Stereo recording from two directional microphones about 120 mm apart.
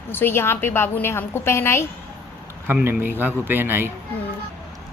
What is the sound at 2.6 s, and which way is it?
A man's voice, 15° right (ahead or behind).